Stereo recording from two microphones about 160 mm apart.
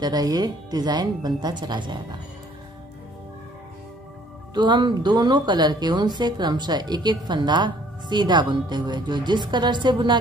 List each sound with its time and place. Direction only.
0.0 s a woman's voice: 25° right (ahead or behind)
4.6 s a woman's voice: 30° right (ahead or behind)